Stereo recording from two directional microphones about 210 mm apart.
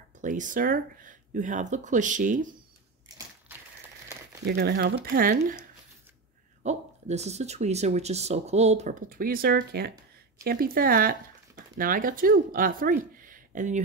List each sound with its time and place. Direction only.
0.2 s speech: 35° right (ahead or behind)
3.5 s a sound: 10° right (ahead or behind)
4.5 s speech: 50° right (ahead or behind)
6.6 s speech: 30° right (ahead or behind)